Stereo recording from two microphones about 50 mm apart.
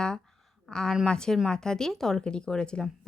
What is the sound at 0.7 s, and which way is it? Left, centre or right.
A woman's voice, centre.